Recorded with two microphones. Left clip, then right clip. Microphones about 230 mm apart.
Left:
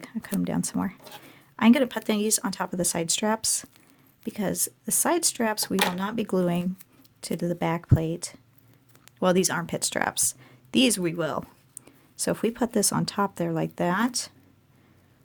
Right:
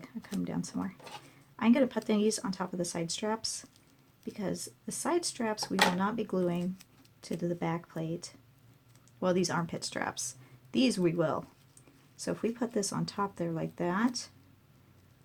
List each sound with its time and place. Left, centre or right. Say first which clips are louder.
0.0 s speech: left 8 dB; left